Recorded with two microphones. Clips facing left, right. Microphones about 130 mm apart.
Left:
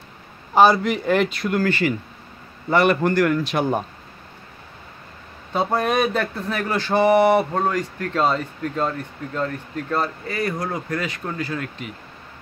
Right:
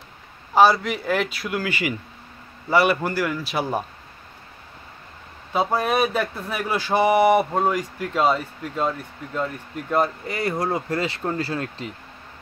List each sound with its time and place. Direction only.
0.6 s a man's voice: centre (ahead or behind)
5.5 s speech: 5° right (ahead or behind); by 11.9 s 30° right (ahead or behind)